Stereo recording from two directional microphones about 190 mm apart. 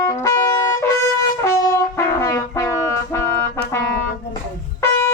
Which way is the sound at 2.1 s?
15° left (ahead or behind).